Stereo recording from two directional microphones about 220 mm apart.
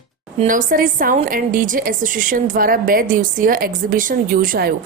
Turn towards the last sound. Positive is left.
turn(degrees=-40)  # may be behind; listen again after turning